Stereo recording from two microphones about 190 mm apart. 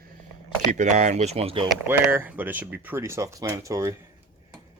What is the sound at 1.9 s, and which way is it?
Speech, 10° right (ahead or behind).